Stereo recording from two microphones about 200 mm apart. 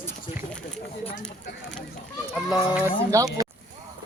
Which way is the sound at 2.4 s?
5° right (ahead or behind).